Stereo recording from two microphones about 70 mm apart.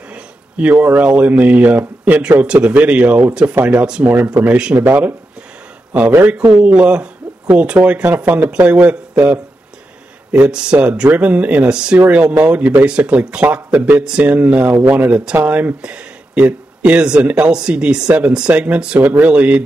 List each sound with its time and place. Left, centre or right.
0.1 s speech: centre
2.4 s a man's voice: centre